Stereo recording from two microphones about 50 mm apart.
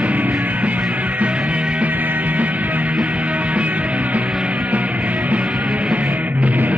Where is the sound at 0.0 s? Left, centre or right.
Right.